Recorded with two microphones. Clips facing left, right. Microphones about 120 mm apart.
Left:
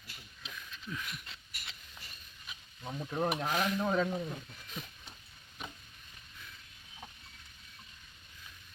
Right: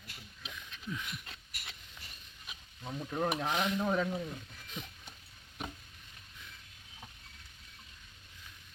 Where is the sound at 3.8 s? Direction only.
Centre (ahead or behind).